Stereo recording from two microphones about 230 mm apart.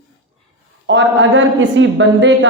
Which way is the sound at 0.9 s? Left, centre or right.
Right.